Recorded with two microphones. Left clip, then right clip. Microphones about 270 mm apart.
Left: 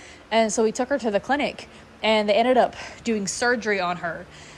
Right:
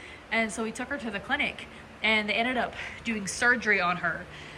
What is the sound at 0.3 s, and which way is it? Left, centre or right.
A woman's voice, centre.